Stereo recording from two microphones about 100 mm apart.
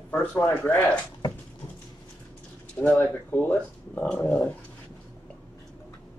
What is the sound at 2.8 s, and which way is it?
Speech, 20° left (ahead or behind).